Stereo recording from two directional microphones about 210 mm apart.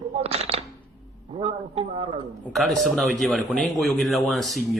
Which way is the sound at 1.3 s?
25° right (ahead or behind).